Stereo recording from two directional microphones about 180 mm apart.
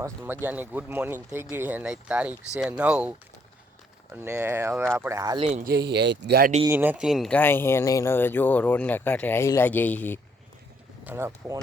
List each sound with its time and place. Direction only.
0.0 s speech: 10° right (ahead or behind)
5.4 s speech: 40° right (ahead or behind)
5.6 s speech: 65° right (ahead or behind)
6.7 s speech: 10° right (ahead or behind); by 10.2 s 10° left (ahead or behind)
11.0 s speech: 15° right (ahead or behind)